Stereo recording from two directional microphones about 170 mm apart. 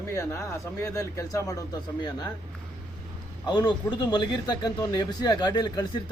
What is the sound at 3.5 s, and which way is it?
A man's voice, 25° left (ahead or behind).